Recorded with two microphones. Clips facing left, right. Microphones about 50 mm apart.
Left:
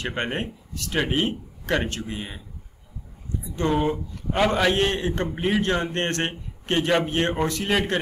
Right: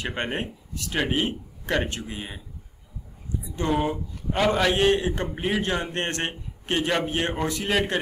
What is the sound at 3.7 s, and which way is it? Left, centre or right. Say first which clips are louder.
Speech: even; centre.